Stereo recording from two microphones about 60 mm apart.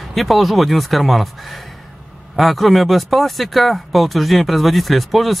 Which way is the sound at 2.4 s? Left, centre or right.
Centre.